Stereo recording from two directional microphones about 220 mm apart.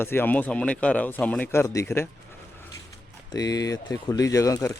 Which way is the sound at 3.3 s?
15° left (ahead or behind).